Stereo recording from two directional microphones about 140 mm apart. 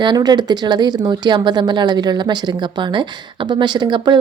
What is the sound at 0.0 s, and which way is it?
Speech, 30° right (ahead or behind).